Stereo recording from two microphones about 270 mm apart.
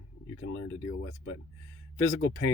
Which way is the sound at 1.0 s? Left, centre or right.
Left.